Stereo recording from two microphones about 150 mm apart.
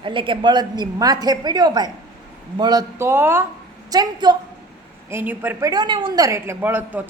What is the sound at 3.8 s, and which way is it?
Speech, 25° right (ahead or behind).